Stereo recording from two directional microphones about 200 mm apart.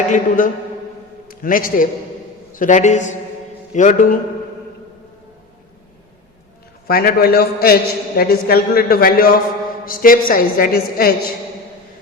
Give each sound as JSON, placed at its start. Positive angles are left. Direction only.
{"t": 0.1, "sound": "a man's voice", "side_deg": 40}
{"t": 6.8, "sound": "a man's voice", "side_deg": 50}